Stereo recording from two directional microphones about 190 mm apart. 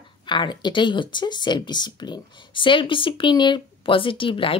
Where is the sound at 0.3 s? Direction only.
25° left (ahead or behind).